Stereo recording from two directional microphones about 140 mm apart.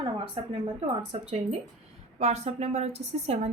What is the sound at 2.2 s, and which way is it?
A woman's voice, 55° right (ahead or behind).